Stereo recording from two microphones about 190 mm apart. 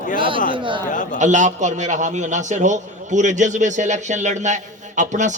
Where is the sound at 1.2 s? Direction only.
40° right (ahead or behind).